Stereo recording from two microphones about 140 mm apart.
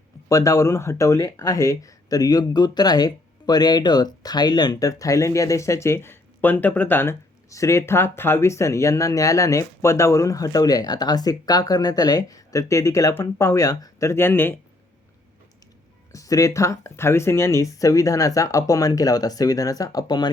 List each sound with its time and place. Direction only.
0.3 s speech: 20° left (ahead or behind)
16.1 s speech: 25° left (ahead or behind)